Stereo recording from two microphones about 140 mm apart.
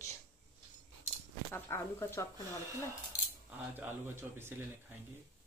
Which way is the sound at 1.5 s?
20° left (ahead or behind).